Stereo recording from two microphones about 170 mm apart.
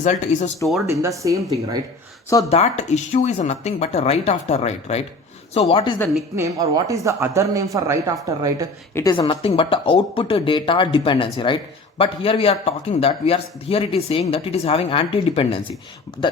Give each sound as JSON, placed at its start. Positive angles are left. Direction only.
{"t": 0.0, "sound": "speech", "side_deg": 45}
{"t": 0.9, "sound": "speech", "side_deg": -20}
{"t": 2.5, "sound": "speech", "side_deg": 40}
{"t": 6.3, "sound": "speech", "side_deg": -20}
{"t": 9.1, "sound": "speech", "side_deg": 30}